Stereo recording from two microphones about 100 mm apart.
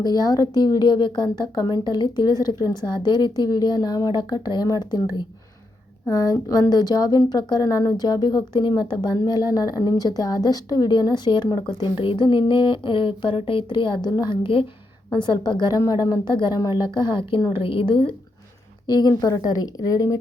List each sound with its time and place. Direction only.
0.0 s a woman's voice: 40° left (ahead or behind)
8.5 s a woman's voice: 50° left (ahead or behind)
15.1 s a woman's voice: 50° left (ahead or behind)
18.9 s a woman's voice: 45° left (ahead or behind)